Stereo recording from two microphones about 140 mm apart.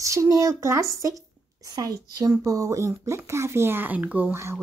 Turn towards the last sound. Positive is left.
turn(degrees=-15)  # may be behind; listen again after turning